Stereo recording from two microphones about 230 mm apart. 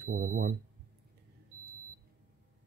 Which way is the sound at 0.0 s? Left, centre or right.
Right.